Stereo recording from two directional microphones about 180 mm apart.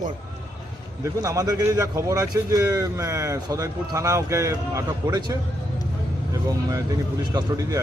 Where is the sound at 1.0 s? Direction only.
15° right (ahead or behind).